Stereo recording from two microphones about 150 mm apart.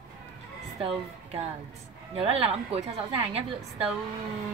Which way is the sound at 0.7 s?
40° right (ahead or behind).